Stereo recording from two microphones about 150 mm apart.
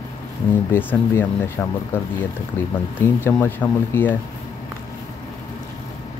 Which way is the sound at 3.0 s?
15° left (ahead or behind).